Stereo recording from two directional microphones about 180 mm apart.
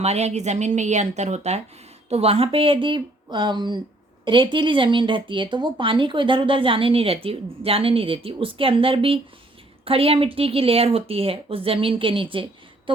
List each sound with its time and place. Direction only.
0.0 s speech: 35° right (ahead or behind)